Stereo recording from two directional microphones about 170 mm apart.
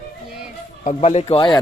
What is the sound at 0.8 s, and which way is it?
Speech, 40° left (ahead or behind).